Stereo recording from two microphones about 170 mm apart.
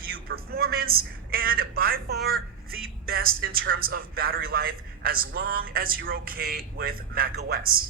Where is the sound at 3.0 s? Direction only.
60° right (ahead or behind).